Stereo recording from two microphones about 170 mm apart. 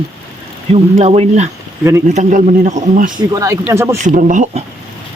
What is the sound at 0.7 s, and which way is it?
Speech, 35° right (ahead or behind).